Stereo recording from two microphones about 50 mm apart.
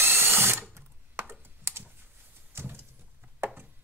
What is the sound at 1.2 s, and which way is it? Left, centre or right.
Computer keyboard, right.